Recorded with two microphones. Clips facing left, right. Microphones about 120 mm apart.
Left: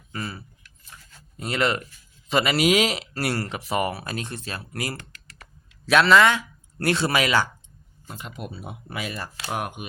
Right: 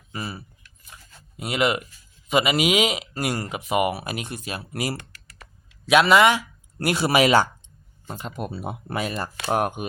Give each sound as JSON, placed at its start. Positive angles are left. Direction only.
{"t": 0.1, "sound": "keys jangling", "side_deg": -15}
{"t": 0.9, "sound": "a sound", "side_deg": -15}
{"t": 1.4, "sound": "a man's voice", "side_deg": -10}
{"t": 8.0, "sound": "speech", "side_deg": -35}